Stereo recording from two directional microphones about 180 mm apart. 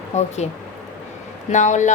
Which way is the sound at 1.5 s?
40° left (ahead or behind).